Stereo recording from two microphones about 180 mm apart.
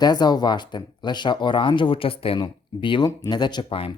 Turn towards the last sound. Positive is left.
turn(degrees=30)  # may be behind; listen again after turning